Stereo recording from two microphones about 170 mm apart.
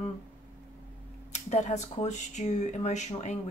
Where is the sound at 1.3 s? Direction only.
40° left (ahead or behind).